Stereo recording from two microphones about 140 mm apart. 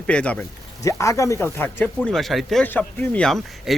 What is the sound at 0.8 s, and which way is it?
Speech, 20° left (ahead or behind).